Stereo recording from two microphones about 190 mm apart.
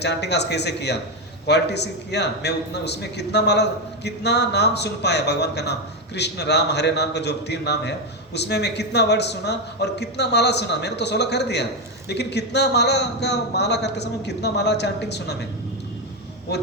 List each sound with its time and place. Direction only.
0.0 s a man's voice: 65° left (ahead or behind)